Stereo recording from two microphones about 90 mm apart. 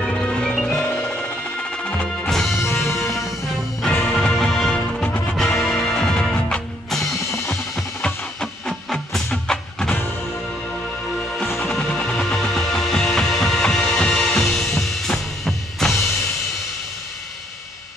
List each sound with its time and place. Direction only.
0.0 s music: 5° left (ahead or behind)
0.7 s music: 20° left (ahead or behind)
2.6 s music: 30° left (ahead or behind)
3.0 s music: centre (ahead or behind)
4.7 s music: 15° left (ahead or behind)
11.6 s music: 15° left (ahead or behind)